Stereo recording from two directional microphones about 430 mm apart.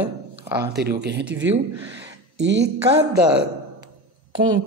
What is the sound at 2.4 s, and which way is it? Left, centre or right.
Speech, right.